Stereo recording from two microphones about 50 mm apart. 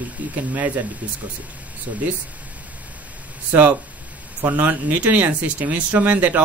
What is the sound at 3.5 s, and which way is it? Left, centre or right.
Speech, right.